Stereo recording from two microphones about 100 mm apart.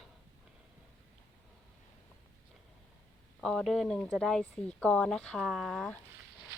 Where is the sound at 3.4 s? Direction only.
Centre (ahead or behind).